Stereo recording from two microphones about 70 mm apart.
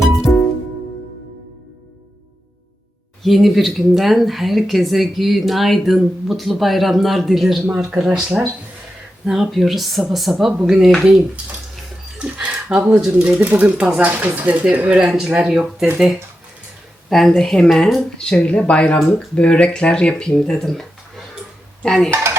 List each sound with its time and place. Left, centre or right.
3.2 s speech: centre
12.2 s a sound: centre
13.1 s speech: right
15.0 s speech: centre
17.1 s speech: centre